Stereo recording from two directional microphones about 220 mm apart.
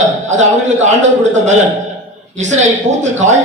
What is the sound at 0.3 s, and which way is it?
A man's voice, 30° right (ahead or behind).